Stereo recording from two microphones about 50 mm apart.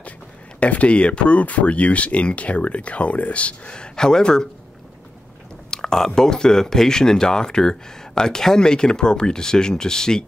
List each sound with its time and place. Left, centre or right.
0.6 s speech: left
5.7 s speech: centre